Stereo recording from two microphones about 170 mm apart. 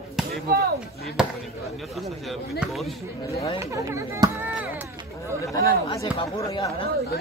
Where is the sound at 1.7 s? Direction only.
Centre (ahead or behind).